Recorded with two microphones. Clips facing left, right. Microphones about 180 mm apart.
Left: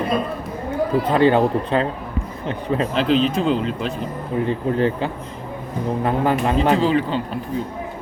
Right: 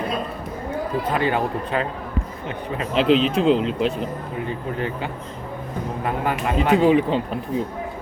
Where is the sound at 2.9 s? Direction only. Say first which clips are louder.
Right 3 dB; centre (ahead or behind).